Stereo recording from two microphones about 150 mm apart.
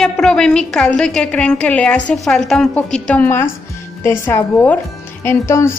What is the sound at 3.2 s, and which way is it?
Speech, 15° left (ahead or behind).